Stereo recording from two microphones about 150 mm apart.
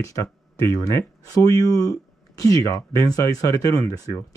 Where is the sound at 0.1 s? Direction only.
20° left (ahead or behind).